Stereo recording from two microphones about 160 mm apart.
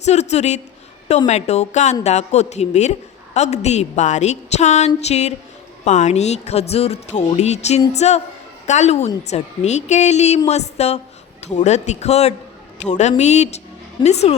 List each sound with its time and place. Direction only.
0.0 s a woman's voice: 45° left (ahead or behind)